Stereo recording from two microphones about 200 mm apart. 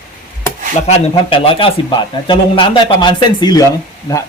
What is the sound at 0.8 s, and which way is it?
Speech, 30° left (ahead or behind).